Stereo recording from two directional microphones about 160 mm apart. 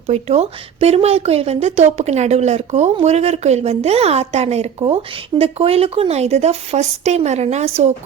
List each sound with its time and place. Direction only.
0.1 s a woman's voice: 40° right (ahead or behind)